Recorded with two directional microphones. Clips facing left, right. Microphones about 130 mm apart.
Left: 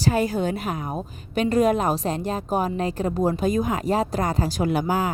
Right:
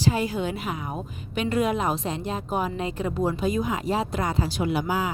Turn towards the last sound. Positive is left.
turn(degrees=45)  # may be behind; listen again after turning